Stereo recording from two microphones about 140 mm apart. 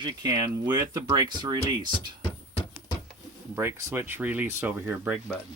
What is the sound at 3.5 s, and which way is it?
Speech, 20° right (ahead or behind).